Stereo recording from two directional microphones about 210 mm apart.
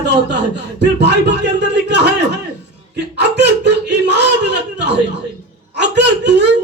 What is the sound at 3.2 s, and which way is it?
A woman's voice, 55° right (ahead or behind).